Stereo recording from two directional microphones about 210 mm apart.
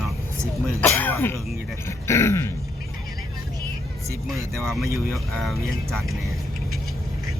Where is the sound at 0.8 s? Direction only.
10° left (ahead or behind).